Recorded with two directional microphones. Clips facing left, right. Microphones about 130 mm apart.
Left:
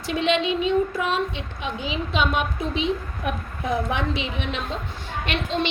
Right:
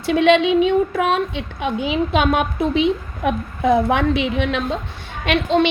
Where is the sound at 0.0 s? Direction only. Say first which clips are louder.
Right 8 dB; 65° right (ahead or behind).